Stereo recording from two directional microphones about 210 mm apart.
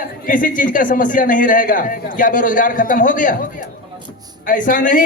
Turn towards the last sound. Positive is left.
turn(degrees=40)  # may be behind; listen again after turning